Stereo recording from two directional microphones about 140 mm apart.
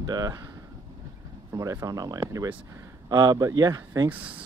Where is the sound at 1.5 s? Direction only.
25° right (ahead or behind).